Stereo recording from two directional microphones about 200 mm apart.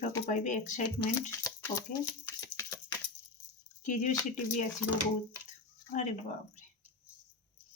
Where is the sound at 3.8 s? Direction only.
40° left (ahead or behind).